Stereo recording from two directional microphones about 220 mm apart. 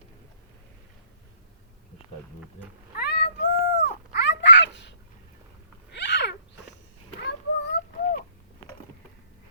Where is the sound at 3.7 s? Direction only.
50° left (ahead or behind).